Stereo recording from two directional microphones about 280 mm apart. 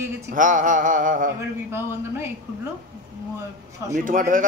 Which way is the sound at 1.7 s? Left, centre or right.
Centre.